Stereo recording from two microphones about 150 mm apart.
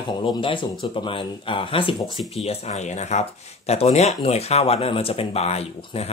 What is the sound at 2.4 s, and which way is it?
Speech, 45° left (ahead or behind).